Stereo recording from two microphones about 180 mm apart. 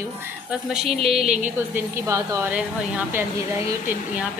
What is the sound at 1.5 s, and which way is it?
A woman's voice, 15° right (ahead or behind).